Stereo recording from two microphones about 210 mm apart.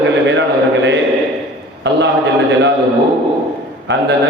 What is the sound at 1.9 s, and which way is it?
Speech, 55° right (ahead or behind).